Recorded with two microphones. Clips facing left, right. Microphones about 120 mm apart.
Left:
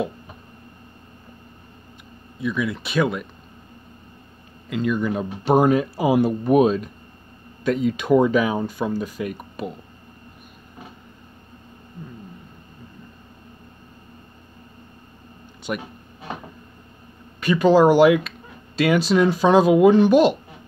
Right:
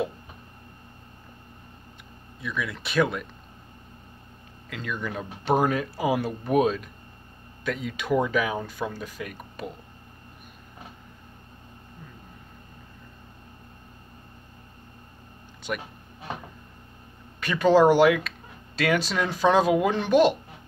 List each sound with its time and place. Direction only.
2.4 s speech: 15° left (ahead or behind)
4.6 s speech: 15° left (ahead or behind)
15.7 s speech: 15° left (ahead or behind)
17.4 s speech: 10° left (ahead or behind)